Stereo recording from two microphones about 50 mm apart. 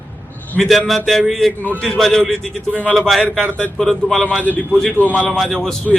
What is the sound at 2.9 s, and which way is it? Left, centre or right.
Speech, centre.